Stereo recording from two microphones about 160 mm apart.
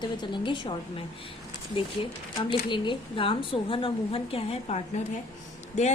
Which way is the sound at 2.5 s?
30° left (ahead or behind).